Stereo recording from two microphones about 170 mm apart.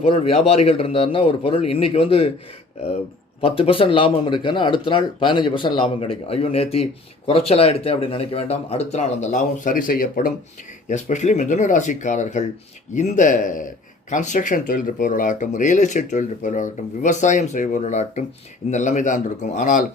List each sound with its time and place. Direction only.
0.0 s speech: 35° left (ahead or behind)
3.4 s speech: 30° left (ahead or behind); by 10.3 s 55° left (ahead or behind)
10.8 s speech: 45° left (ahead or behind)